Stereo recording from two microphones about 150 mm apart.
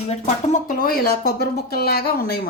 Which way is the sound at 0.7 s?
75° left (ahead or behind).